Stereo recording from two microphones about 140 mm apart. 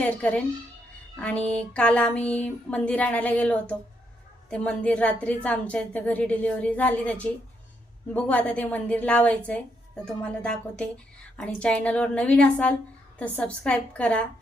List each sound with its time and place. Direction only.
0.0 s a woman's voice: 10° left (ahead or behind)